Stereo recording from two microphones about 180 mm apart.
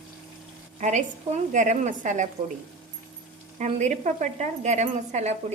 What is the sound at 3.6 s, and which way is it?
Speech, 40° right (ahead or behind).